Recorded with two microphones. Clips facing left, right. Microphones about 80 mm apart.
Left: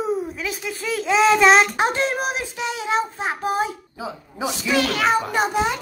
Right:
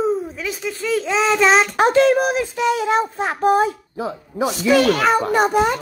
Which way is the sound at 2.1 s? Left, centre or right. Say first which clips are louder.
Right 7 dB; right.